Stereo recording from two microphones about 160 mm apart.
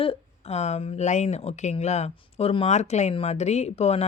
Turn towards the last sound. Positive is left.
turn(degrees=40)  # may be behind; listen again after turning